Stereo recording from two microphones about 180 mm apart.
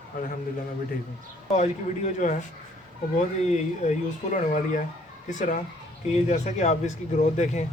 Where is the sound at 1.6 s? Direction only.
40° left (ahead or behind).